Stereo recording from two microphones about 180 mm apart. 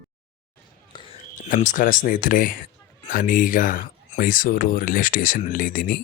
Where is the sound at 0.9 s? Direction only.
25° left (ahead or behind).